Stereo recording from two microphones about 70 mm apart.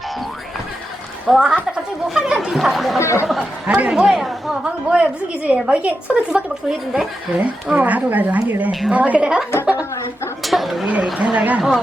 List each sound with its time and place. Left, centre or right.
1.3 s a woman's voice: centre
3.0 s speech: left
3.7 s a woman's voice: centre
4.6 s a woman's voice: centre
6.7 s speech: centre
7.3 s speech: centre
10.4 s speech: centre
11.0 s speech: centre